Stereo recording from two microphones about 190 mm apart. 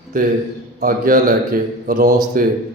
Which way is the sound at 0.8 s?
50° right (ahead or behind).